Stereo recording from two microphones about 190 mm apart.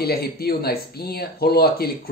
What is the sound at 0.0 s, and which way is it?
Speech, 55° left (ahead or behind).